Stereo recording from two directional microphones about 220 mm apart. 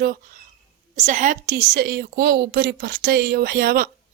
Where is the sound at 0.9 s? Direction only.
35° right (ahead or behind).